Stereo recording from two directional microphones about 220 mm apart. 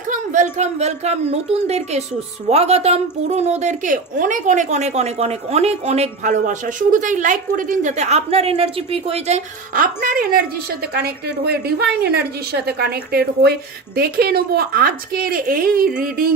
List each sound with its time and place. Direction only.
0.1 s a woman's voice: 35° right (ahead or behind)